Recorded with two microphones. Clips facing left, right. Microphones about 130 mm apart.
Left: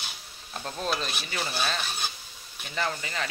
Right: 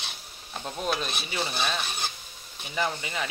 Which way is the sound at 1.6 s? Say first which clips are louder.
Right 1 dB; 5° right (ahead or behind).